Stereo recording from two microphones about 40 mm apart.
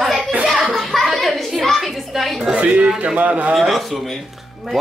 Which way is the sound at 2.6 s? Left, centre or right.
Right.